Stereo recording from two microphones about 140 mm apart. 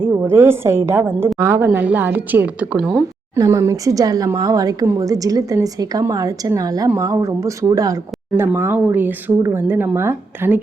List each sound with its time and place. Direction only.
0.1 s speech: 15° right (ahead or behind)
3.3 s a woman's voice: 25° right (ahead or behind)